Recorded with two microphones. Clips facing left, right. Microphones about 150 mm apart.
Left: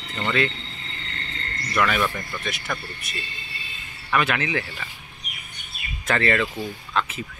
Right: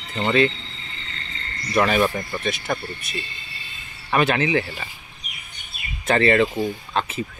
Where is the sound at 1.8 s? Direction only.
35° right (ahead or behind).